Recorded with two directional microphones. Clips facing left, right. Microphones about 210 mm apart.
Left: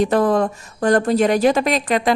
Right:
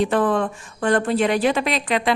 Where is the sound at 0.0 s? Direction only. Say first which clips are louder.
Left 3 dB; 40° left (ahead or behind).